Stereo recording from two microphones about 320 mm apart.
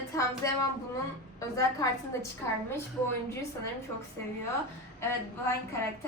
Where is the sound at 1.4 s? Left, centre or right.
Centre.